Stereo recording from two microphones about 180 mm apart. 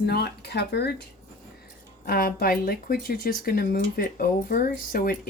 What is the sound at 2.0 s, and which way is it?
Speech, 55° left (ahead or behind).